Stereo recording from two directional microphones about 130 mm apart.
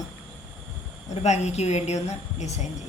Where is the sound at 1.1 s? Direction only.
60° left (ahead or behind).